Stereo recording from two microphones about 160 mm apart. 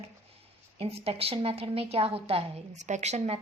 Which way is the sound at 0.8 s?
35° right (ahead or behind).